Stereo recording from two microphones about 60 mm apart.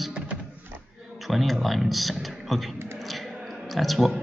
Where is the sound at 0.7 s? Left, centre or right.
Right.